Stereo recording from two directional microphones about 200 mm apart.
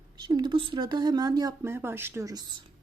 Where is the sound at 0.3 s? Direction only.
25° right (ahead or behind).